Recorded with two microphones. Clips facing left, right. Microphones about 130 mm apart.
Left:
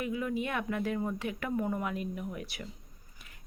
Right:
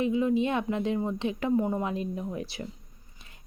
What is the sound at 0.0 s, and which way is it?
Speech, 25° right (ahead or behind).